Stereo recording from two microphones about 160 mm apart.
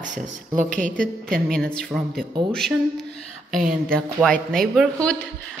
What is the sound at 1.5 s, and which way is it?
Speech, 5° left (ahead or behind).